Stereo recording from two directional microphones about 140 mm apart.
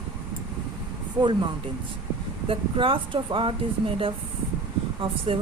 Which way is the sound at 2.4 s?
40° right (ahead or behind).